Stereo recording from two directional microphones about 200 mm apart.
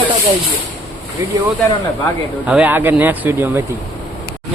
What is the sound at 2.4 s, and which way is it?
Speech, 5° right (ahead or behind).